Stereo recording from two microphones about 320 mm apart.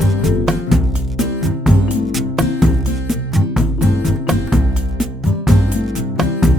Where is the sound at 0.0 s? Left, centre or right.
Centre.